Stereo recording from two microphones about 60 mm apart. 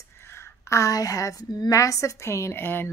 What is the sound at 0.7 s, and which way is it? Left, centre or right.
A woman's voice, left.